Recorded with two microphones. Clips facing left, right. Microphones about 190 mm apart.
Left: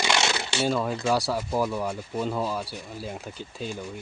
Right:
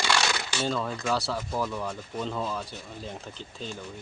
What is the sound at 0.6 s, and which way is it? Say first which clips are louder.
Speech: left 5 dB; 10° left (ahead or behind).